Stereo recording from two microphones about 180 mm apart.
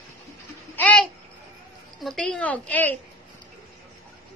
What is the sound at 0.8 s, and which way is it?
A woman's voice, 10° left (ahead or behind).